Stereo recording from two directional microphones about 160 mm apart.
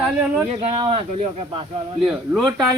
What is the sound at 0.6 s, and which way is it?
Speech, 40° right (ahead or behind).